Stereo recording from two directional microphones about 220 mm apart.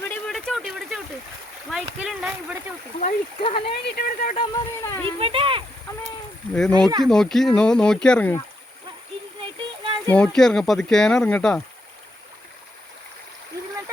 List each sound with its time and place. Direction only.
0.0 s a sound: 5° left (ahead or behind)
1.7 s speech: 5° right (ahead or behind)
3.0 s speech: 25° left (ahead or behind)
3.8 s speech: 45° left (ahead or behind)
4.4 s speech: 15° left (ahead or behind)
5.2 s speech: 25° right (ahead or behind)
6.5 s speech: 5° left (ahead or behind)
9.4 s a sound: 25° right (ahead or behind)
10.1 s speech: 5° left (ahead or behind)